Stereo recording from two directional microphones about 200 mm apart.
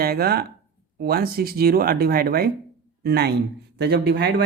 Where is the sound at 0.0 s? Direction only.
50° right (ahead or behind).